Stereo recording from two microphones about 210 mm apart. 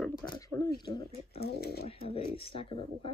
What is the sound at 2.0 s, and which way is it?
Speech, 25° left (ahead or behind).